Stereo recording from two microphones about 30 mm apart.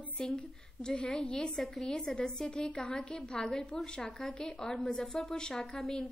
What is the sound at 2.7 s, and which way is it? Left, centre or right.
A woman's voice, left.